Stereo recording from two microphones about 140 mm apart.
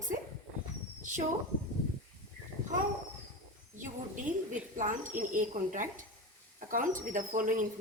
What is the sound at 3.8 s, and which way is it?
A woman's voice, 65° right (ahead or behind).